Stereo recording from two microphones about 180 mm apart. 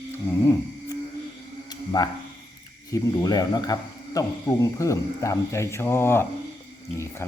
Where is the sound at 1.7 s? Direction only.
25° left (ahead or behind).